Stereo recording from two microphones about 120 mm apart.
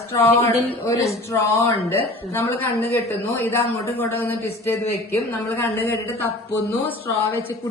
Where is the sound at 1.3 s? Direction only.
25° left (ahead or behind).